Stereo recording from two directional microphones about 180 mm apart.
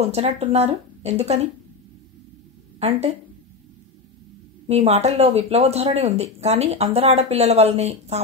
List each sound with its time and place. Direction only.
0.0 s speech: 35° right (ahead or behind)
2.8 s speech: 30° right (ahead or behind)
4.6 s speech: 35° right (ahead or behind)